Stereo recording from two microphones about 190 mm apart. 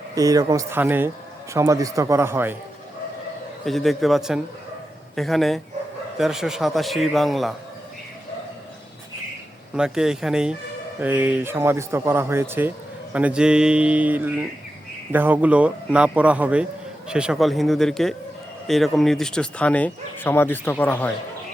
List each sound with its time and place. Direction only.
0.1 s speech: 20° right (ahead or behind)
3.7 s a man's voice: centre (ahead or behind)
9.7 s a man's voice: 5° right (ahead or behind)